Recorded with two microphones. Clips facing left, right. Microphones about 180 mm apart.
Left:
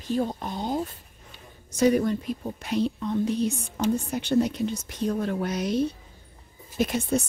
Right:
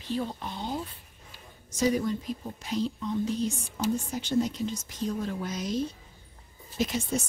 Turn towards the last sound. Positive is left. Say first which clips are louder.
# left 4 dB
turn(degrees=60)  # may be behind; listen again after turning